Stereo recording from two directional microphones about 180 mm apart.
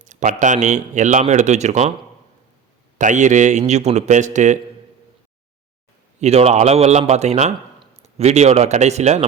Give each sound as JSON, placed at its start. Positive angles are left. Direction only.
{"t": 0.0, "sound": "speech", "side_deg": -45}
{"t": 3.0, "sound": "a man's voice", "side_deg": -45}
{"t": 6.1, "sound": "a man's voice", "side_deg": -35}